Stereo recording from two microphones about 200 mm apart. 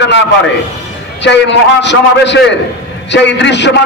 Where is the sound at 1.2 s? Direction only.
60° left (ahead or behind).